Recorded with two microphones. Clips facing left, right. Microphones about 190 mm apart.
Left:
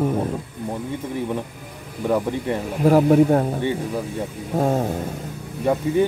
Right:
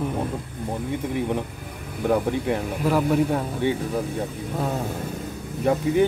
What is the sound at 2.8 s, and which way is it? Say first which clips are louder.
Speech: left 7 dB; 45° left (ahead or behind).